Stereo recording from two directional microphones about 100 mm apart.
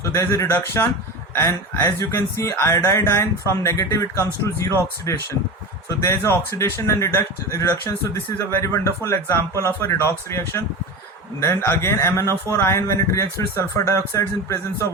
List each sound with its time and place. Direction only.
0.0 s speech: 30° left (ahead or behind)